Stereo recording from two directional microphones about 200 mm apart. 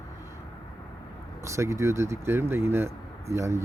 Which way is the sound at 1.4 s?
15° right (ahead or behind).